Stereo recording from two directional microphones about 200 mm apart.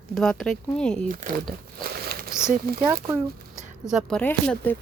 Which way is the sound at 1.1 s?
40° right (ahead or behind).